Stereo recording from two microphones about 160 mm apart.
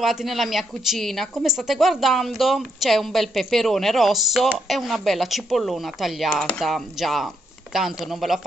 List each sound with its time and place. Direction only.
0.0 s speech: centre (ahead or behind)